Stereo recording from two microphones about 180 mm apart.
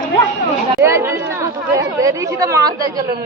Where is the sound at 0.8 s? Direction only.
15° right (ahead or behind).